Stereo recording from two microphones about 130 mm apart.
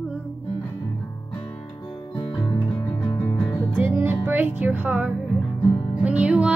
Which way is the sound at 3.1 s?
15° left (ahead or behind).